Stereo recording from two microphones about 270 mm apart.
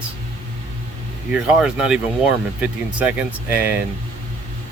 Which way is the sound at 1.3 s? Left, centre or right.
Centre.